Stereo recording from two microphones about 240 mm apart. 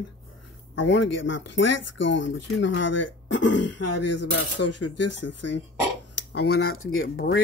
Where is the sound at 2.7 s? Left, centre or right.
Left.